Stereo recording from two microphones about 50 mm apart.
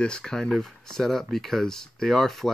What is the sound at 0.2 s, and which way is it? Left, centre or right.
Speech, centre.